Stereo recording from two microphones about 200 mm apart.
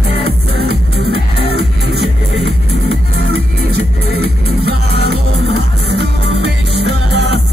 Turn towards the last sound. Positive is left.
turn(degrees=-60)  # may be behind; listen again after turning